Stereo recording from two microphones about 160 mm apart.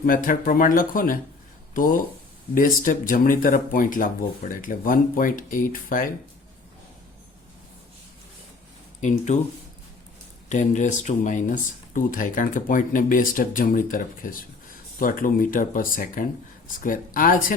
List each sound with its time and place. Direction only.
0.0 s speech: 60° left (ahead or behind)
9.0 s speech: 50° left (ahead or behind)
10.5 s speech: 50° left (ahead or behind)